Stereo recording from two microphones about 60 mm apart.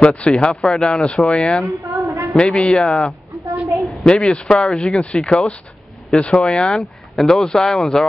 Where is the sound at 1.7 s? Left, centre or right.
Right.